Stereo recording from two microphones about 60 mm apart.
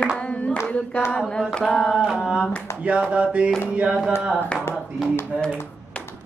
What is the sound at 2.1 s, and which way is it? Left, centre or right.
Speech, centre.